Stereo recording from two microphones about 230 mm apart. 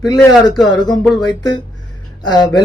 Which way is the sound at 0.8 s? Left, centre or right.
Centre.